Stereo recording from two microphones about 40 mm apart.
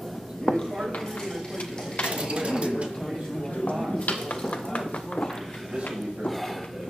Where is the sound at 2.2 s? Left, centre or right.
Right.